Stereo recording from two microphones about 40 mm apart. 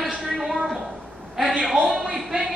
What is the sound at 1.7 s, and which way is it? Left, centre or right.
Speech, centre.